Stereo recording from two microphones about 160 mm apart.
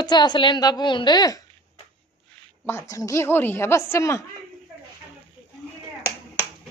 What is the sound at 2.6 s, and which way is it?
A woman's voice, 15° left (ahead or behind).